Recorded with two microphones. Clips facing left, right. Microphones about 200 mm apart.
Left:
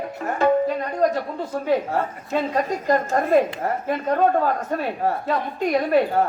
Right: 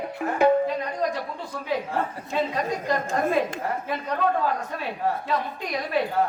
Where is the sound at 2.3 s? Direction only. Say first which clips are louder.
Left 4 dB; 45° left (ahead or behind).